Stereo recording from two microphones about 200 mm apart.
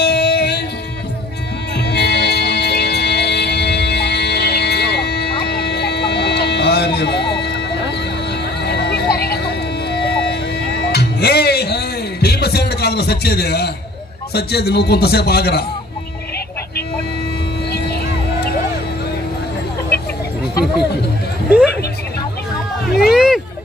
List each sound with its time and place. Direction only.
0.0 s music: 55° left (ahead or behind)
1.8 s music: 55° left (ahead or behind)
14.3 s a man's voice: 55° left (ahead or behind)
17.6 s vehicle: 55° left (ahead or behind)
21.5 s a sound: 5° right (ahead or behind)
23.1 s music: 5° right (ahead or behind)